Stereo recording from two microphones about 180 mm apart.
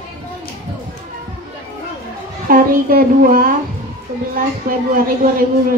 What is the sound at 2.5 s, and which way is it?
A woman's voice, 50° right (ahead or behind).